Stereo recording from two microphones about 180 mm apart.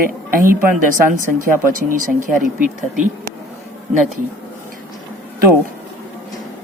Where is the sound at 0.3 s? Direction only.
50° right (ahead or behind).